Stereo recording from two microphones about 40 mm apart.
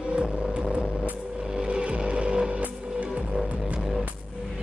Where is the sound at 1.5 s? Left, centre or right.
Right.